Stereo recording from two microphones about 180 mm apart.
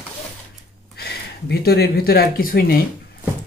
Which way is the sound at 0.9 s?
60° left (ahead or behind).